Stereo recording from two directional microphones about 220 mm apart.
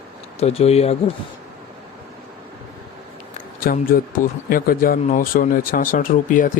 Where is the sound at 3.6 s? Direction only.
40° left (ahead or behind).